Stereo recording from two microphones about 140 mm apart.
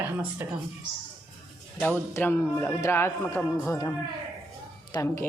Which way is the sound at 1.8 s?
10° left (ahead or behind).